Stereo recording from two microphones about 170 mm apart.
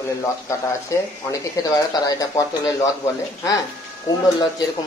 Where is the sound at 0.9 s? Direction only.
20° left (ahead or behind).